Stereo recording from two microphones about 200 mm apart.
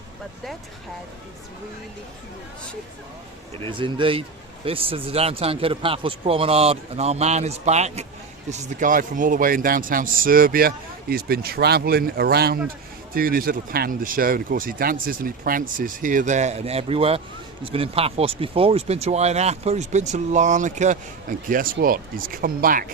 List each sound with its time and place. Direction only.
3.7 s a man's voice: 25° right (ahead or behind); by 22.9 s 45° right (ahead or behind)